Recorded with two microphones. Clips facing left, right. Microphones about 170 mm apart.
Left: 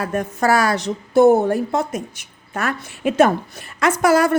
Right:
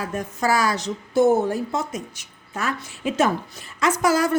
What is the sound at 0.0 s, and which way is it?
A woman's voice, 60° left (ahead or behind).